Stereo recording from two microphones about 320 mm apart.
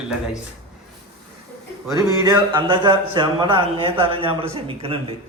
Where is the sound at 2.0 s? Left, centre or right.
Centre.